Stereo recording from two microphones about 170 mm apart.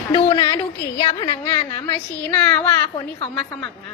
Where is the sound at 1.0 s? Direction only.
20° left (ahead or behind).